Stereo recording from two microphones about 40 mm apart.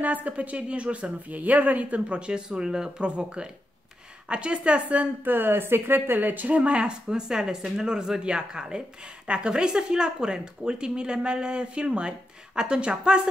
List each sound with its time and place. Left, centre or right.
0.0 s speech: right
2.0 s speech: right
5.2 s speech: right
6.5 s speech: right